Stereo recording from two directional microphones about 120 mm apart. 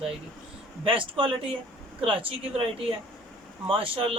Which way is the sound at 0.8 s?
45° right (ahead or behind).